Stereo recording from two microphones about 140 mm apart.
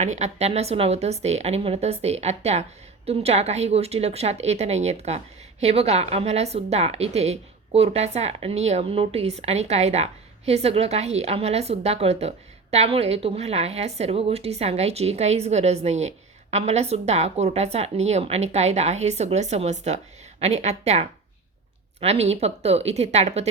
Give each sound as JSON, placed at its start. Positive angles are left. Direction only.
{"t": 0.0, "sound": "a woman's voice", "side_deg": -55}